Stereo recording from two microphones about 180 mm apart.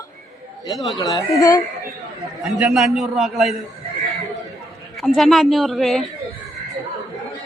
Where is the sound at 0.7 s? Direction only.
Centre (ahead or behind).